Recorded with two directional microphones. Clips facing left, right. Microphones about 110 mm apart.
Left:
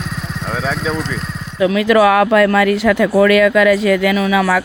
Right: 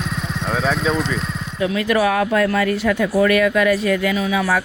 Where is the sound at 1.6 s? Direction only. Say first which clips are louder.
Left 6 dB; 90° left.